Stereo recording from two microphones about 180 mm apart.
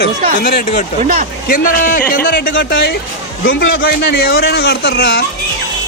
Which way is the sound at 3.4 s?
85° left.